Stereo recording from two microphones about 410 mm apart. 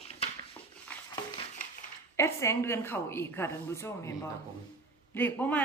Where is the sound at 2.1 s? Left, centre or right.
Centre.